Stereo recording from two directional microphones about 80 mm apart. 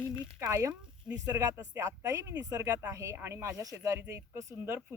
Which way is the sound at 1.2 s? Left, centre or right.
Right.